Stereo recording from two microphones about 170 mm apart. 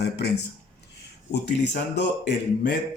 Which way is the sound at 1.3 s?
85° left.